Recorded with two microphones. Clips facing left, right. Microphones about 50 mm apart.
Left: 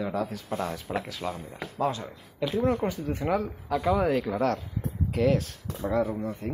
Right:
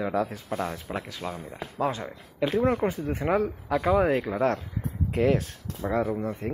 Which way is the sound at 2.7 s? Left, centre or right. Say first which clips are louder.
Right 2 dB; right.